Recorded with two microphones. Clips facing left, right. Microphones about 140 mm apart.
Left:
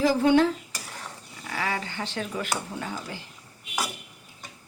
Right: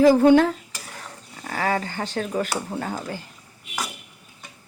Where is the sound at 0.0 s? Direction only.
55° right (ahead or behind).